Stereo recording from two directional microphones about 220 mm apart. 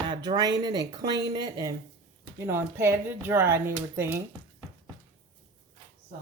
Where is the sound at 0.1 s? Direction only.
20° right (ahead or behind).